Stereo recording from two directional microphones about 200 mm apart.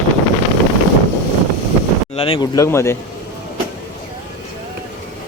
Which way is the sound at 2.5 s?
15° left (ahead or behind).